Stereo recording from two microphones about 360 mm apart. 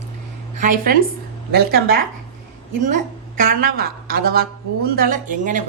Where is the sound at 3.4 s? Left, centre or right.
Right.